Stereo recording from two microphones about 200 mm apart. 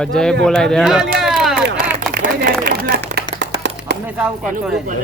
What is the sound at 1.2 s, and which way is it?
Run, centre (ahead or behind).